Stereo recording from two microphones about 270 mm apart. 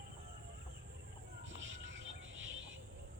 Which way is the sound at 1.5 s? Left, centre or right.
Right.